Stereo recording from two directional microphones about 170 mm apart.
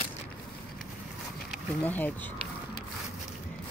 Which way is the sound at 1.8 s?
10° left (ahead or behind).